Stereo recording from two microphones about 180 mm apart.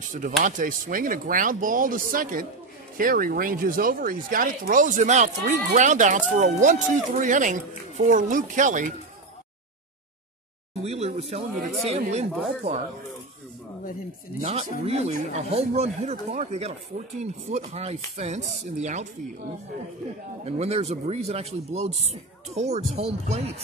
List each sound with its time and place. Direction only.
0.0 s speech: 45° right (ahead or behind)
10.8 s speech: 35° right (ahead or behind)
14.4 s speech: 35° right (ahead or behind)
20.4 s speech: 35° right (ahead or behind)